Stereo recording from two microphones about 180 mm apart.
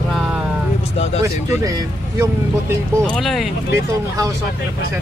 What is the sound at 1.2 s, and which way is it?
Speech, 20° right (ahead or behind).